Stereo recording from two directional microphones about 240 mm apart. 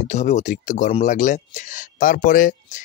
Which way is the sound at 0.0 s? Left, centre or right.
Left.